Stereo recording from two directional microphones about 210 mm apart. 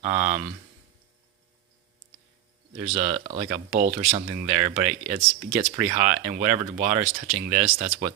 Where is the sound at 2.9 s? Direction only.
35° right (ahead or behind).